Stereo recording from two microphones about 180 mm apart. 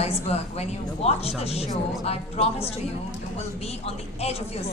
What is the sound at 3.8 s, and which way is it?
Speech, 35° left (ahead or behind).